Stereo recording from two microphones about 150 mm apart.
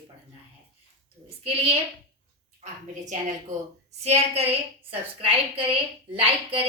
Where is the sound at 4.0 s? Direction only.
45° right (ahead or behind).